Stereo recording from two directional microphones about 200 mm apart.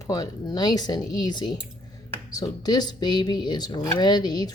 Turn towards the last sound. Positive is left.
turn(degrees=20)  # may be behind; listen again after turning